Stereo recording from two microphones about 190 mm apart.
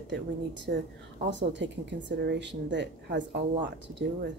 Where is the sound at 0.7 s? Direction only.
65° right (ahead or behind).